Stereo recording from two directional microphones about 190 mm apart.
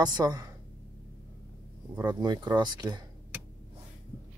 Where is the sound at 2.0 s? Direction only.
20° right (ahead or behind).